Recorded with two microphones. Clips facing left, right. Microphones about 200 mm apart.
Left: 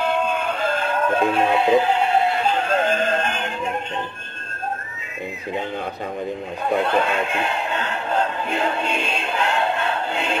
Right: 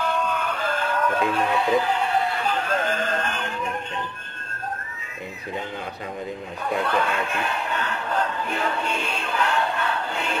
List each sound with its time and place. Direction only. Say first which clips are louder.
0.0 s music: left 4 dB; 25° left (ahead or behind)
6.6 s a man's voice: left 4 dB; 25° left (ahead or behind)